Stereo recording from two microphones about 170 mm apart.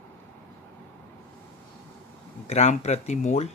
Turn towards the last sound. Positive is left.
turn(degrees=40)  # may be behind; listen again after turning